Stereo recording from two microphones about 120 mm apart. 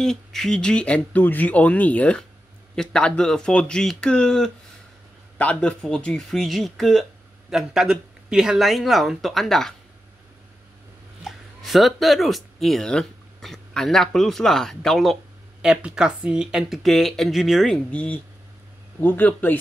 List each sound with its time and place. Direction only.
0.0 s speech: 5° left (ahead or behind)
11.2 s speech: centre (ahead or behind)
17.9 s speech: 10° left (ahead or behind)